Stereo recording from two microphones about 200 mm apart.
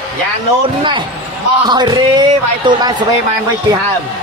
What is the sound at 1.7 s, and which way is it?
Speech, 20° right (ahead or behind).